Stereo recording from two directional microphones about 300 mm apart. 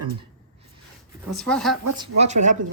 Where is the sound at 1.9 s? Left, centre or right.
Centre.